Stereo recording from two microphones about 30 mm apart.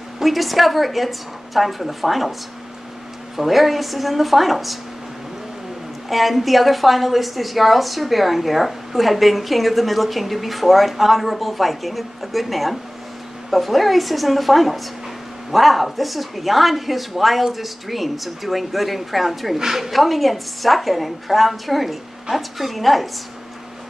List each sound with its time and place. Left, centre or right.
0.2 s a woman's voice: centre
3.3 s a woman's voice: centre
6.0 s a woman's voice: centre
19.6 s speech: centre
19.9 s a woman's voice: centre